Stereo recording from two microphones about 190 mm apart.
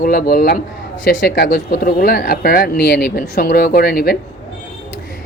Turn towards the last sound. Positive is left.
turn(degrees=50)  # may be behind; listen again after turning